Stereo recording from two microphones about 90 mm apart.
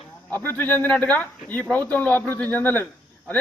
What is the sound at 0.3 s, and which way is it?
A man's voice, 20° left (ahead or behind).